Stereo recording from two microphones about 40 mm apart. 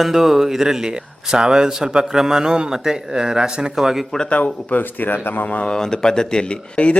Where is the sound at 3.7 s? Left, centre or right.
Centre.